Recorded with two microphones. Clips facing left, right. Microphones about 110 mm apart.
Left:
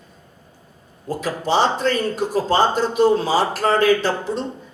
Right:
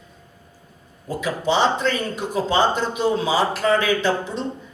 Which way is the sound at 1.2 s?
40° left (ahead or behind).